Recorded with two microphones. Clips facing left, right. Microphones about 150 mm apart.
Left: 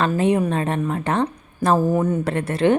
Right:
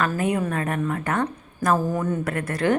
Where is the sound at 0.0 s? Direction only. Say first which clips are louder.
Left 5 dB; 25° left (ahead or behind).